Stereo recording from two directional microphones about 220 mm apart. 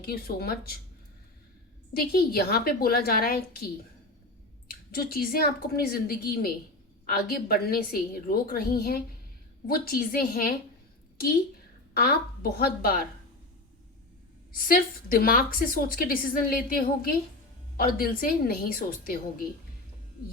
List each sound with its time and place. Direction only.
0.0 s a woman's voice: 45° left (ahead or behind)
1.9 s a woman's voice: 45° left (ahead or behind)
4.9 s a woman's voice: 45° left (ahead or behind)
11.9 s a woman's voice: 45° left (ahead or behind)
14.6 s a woman's voice: 40° left (ahead or behind)